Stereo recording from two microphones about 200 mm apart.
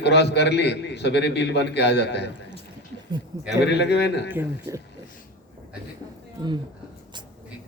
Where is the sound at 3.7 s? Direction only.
60° left (ahead or behind).